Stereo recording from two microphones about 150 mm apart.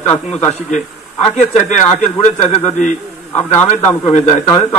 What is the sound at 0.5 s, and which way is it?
A man's voice, 50° left (ahead or behind).